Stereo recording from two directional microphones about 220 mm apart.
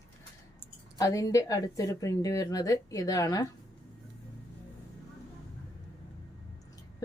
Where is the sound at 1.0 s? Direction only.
15° left (ahead or behind).